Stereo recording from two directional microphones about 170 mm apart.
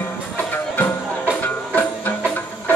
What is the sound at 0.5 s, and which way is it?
Music, 10° left (ahead or behind).